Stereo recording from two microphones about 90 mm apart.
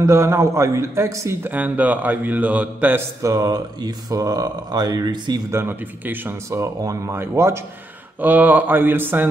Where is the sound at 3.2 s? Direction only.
40° right (ahead or behind).